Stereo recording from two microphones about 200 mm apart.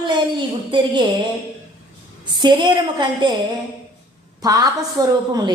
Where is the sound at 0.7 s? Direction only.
25° right (ahead or behind).